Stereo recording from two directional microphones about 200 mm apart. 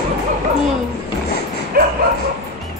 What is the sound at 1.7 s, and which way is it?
Bow-wow, 50° right (ahead or behind).